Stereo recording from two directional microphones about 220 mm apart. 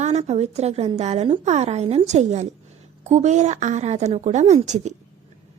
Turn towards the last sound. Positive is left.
turn(degrees=-30)  # may be behind; listen again after turning